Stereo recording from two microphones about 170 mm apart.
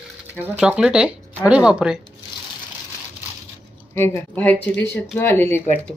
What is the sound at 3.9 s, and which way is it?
A woman's voice, 15° left (ahead or behind).